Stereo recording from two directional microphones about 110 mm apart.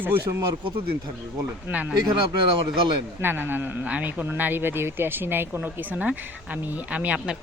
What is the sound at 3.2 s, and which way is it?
A man's voice, 20° right (ahead or behind).